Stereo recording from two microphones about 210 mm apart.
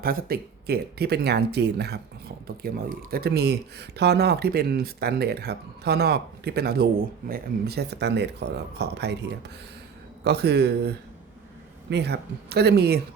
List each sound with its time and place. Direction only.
0.0 s speech: 45° right (ahead or behind)
10.2 s speech: 50° right (ahead or behind)